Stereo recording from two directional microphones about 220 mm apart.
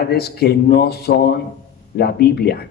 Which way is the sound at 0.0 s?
45° left (ahead or behind).